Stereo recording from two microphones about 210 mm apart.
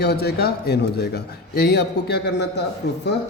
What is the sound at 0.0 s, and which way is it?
A man's voice, 50° left (ahead or behind).